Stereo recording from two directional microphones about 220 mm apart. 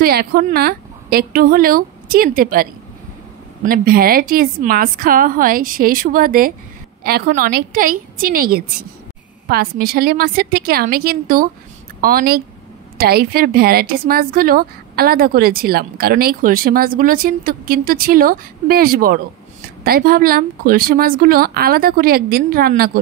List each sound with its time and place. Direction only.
0.0 s a woman's voice: 45° right (ahead or behind)